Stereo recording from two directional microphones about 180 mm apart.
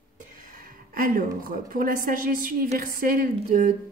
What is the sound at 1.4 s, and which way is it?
A woman's voice, 50° right (ahead or behind).